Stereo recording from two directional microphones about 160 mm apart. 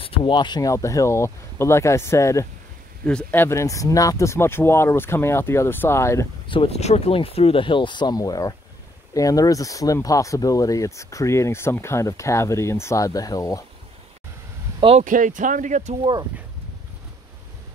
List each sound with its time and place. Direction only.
0.0 s speech: 35° left (ahead or behind); by 6.2 s 15° left (ahead or behind)
6.4 s speech: 35° left (ahead or behind)
14.8 s speech: 35° right (ahead or behind)
15.0 s speech: 55° right (ahead or behind)